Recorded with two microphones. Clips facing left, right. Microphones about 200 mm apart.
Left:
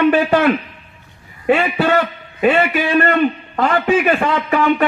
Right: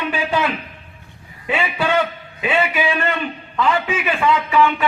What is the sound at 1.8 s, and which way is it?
A man's voice, 45° left (ahead or behind).